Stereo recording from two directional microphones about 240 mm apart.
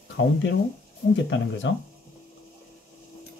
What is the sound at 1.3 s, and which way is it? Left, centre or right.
Speech, left.